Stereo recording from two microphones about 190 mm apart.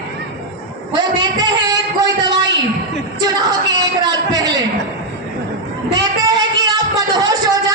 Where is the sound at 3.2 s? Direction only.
20° right (ahead or behind).